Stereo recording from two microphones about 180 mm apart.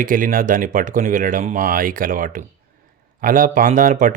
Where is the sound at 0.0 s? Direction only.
50° right (ahead or behind).